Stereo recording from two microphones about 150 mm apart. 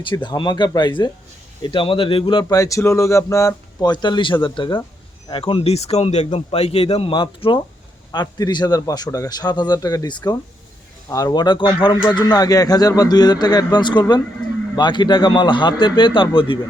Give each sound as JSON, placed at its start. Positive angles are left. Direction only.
{"t": 0.0, "sound": "a man's voice", "side_deg": 30}
{"t": 14.4, "sound": "a sound", "side_deg": 30}
{"t": 14.8, "sound": "speech", "side_deg": 30}